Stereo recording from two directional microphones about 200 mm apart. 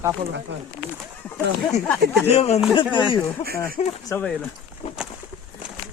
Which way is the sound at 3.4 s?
50° right (ahead or behind).